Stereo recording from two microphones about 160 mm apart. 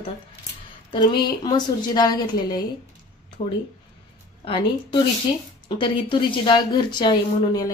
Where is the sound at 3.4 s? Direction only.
40° left (ahead or behind).